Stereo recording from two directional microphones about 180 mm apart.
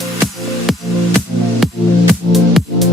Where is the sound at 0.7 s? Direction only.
Centre (ahead or behind).